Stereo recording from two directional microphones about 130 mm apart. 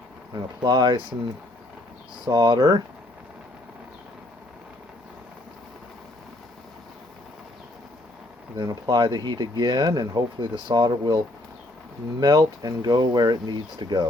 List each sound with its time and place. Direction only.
0.3 s speech: 35° right (ahead or behind)
2.2 s speech: 30° right (ahead or behind)
8.5 s speech: 30° right (ahead or behind)
12.2 s speech: 30° right (ahead or behind)